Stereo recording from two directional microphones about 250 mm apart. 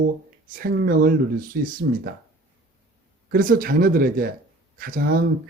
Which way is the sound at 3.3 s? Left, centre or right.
Right.